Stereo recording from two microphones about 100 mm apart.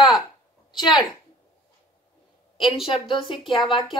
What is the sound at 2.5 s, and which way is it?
A woman's voice, 60° left (ahead or behind).